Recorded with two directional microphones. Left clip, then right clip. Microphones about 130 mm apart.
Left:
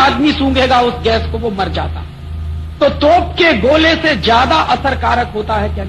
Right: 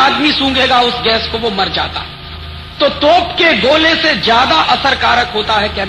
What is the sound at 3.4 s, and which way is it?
A man's voice, 15° right (ahead or behind).